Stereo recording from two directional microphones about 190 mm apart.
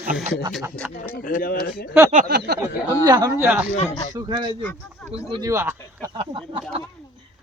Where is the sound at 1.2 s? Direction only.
45° left (ahead or behind).